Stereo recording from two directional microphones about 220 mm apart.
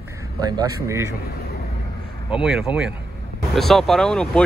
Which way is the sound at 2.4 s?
5° right (ahead or behind).